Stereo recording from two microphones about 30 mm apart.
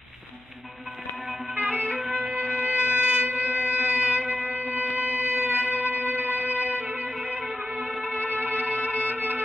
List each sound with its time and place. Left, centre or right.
1.5 s music: right
2.5 s shofar: right
3.3 s music: right
5.0 s music: right
8.3 s music: right
9.0 s music: right